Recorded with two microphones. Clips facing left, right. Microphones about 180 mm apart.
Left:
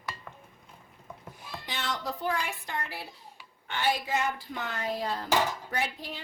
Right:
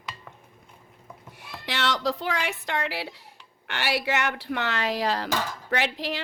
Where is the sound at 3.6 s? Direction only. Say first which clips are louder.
Right 2 dB; 75° right (ahead or behind).